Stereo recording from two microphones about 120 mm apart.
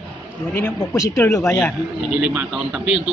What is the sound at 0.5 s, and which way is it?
Speech, 20° left (ahead or behind).